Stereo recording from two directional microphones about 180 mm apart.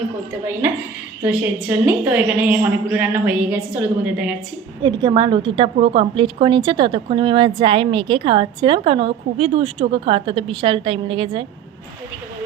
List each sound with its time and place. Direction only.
1.2 s a woman's voice: 5° right (ahead or behind)
4.8 s a woman's voice: 25° right (ahead or behind)